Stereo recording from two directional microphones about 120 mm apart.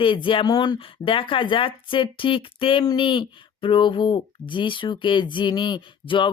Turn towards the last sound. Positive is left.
turn(degrees=45)  # may be behind; listen again after turning